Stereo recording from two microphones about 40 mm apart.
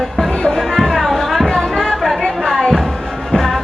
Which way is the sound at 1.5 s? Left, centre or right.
Centre.